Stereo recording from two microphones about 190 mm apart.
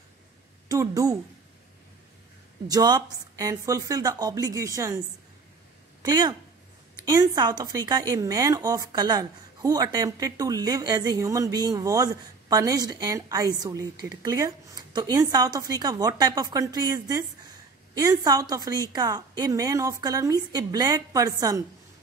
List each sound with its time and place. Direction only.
0.7 s speech: 20° right (ahead or behind)
2.7 s speech: 20° right (ahead or behind)
6.0 s speech: 20° right (ahead or behind)